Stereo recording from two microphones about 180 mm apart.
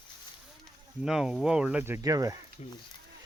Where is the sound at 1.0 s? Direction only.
5° right (ahead or behind); by 2.4 s 20° right (ahead or behind).